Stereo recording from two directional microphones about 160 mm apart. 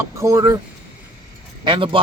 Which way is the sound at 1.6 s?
30° right (ahead or behind).